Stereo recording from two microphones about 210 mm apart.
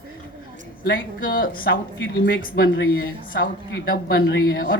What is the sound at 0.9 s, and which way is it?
A woman's voice, 40° left (ahead or behind).